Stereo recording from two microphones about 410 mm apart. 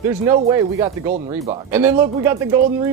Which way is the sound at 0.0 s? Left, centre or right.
Centre.